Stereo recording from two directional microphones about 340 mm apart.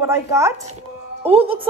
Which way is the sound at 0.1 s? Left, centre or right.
Centre.